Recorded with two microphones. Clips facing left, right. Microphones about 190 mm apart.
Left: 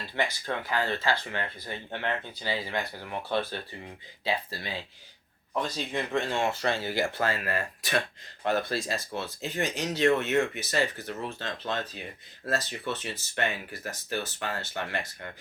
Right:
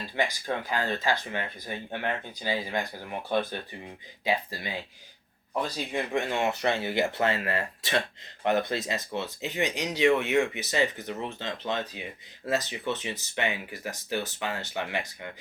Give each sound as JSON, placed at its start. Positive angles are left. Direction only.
{"t": 0.0, "sound": "speech", "side_deg": -15}